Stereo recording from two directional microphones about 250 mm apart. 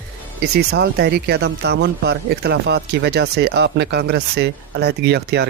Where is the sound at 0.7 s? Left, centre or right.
Right.